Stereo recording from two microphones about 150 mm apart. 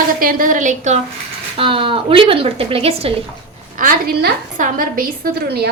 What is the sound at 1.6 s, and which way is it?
Speech, 35° right (ahead or behind).